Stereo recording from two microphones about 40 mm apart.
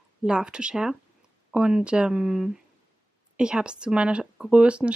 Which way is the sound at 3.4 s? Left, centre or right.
Right.